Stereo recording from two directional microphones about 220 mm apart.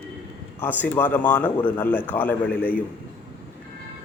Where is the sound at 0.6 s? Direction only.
10° left (ahead or behind).